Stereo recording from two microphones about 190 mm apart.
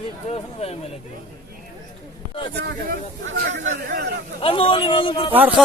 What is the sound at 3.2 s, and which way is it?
Speech, 85° right.